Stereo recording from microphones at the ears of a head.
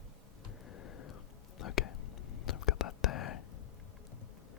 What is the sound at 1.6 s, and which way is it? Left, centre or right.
Whispering, left.